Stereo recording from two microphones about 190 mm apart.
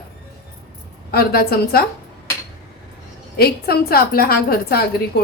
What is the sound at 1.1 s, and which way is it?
Speech, 55° left (ahead or behind).